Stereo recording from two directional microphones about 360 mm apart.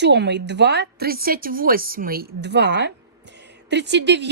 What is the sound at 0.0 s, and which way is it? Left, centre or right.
Speech, right.